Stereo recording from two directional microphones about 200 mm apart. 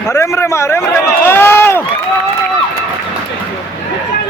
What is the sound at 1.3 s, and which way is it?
Run, 10° left (ahead or behind).